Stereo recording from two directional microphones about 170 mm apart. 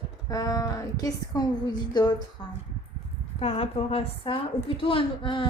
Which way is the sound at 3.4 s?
35° left (ahead or behind).